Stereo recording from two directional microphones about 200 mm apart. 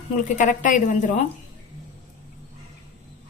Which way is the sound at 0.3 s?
40° left (ahead or behind).